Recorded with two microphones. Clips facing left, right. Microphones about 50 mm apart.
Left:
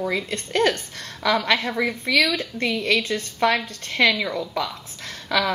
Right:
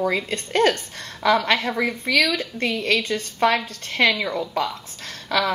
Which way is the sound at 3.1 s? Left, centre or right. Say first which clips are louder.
Right 1 dB; centre.